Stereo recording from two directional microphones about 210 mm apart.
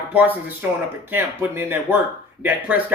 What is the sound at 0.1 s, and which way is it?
Speech, 10° right (ahead or behind).